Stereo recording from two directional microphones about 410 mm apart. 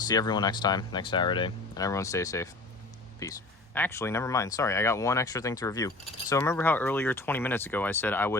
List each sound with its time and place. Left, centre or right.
0.1 s speech: centre